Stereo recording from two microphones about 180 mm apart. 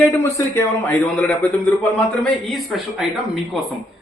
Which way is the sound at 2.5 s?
Centre (ahead or behind).